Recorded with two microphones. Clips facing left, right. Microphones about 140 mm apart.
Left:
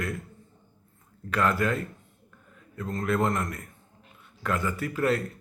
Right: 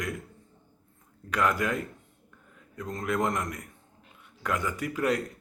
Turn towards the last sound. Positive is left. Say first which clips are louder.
# left 1 dB
turn(degrees=-15)  # may be behind; listen again after turning